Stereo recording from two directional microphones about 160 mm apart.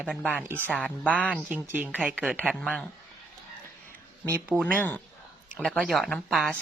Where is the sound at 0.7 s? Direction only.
5° left (ahead or behind).